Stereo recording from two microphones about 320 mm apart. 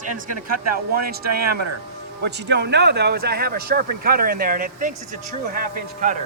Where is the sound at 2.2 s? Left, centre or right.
Right.